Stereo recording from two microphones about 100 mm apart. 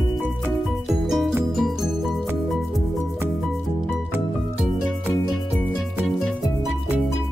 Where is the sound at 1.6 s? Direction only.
Centre (ahead or behind).